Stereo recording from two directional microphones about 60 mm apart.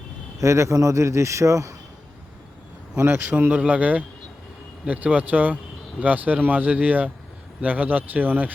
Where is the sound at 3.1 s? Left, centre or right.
Right.